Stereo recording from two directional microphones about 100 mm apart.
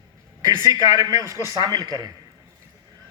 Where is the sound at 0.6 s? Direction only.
40° right (ahead or behind).